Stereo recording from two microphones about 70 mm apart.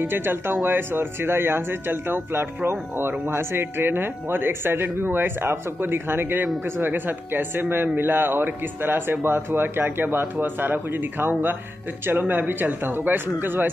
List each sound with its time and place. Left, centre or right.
0.0 s speech: right